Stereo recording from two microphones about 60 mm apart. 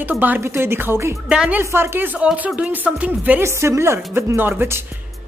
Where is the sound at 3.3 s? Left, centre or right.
Right.